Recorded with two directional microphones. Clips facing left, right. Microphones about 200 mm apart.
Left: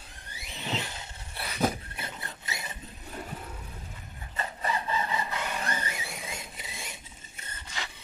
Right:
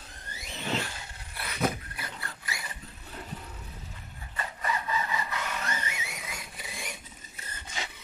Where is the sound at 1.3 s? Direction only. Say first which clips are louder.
Left 1 dB; 30° left (ahead or behind).